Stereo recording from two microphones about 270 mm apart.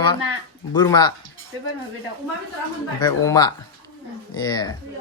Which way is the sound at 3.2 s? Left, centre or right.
Centre.